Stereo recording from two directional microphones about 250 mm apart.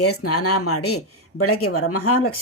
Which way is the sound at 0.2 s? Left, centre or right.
Left.